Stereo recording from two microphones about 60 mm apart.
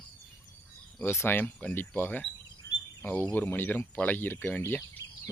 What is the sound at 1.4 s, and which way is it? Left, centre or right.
Speech, left.